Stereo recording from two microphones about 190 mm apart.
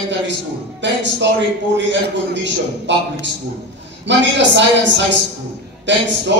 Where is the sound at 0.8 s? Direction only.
70° right (ahead or behind).